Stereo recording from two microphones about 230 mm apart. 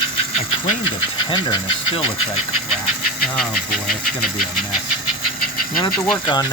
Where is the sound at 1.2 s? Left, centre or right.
Centre.